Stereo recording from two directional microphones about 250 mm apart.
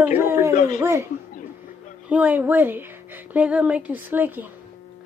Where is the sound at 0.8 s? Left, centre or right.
Centre.